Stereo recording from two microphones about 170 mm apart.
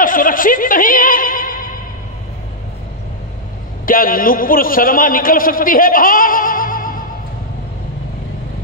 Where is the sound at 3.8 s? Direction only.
55° left (ahead or behind).